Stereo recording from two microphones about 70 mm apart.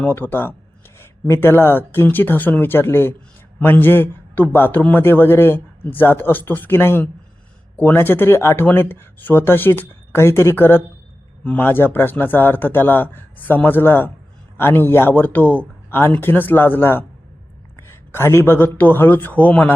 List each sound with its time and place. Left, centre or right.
0.0 s a man's voice: left